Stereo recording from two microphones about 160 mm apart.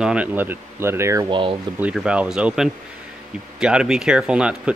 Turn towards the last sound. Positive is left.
turn(degrees=-5)  # may be behind; listen again after turning